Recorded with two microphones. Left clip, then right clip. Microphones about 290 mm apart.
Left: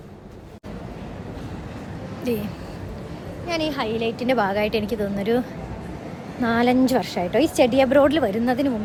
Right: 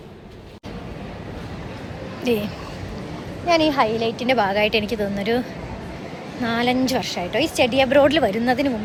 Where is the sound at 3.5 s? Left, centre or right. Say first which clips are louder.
Right 8 dB; centre.